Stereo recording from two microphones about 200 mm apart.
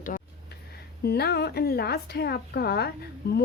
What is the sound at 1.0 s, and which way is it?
A woman's voice, 55° left (ahead or behind).